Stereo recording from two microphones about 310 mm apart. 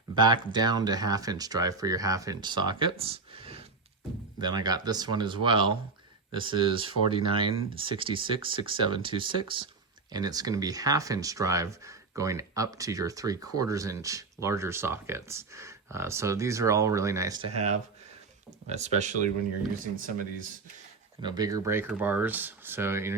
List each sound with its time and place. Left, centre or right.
0.2 s speech: centre
21.2 s speech: centre